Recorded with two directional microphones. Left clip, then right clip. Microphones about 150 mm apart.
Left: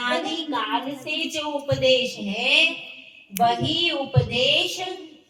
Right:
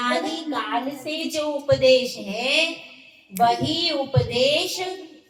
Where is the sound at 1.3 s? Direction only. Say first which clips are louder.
Right 4 dB; 25° right (ahead or behind).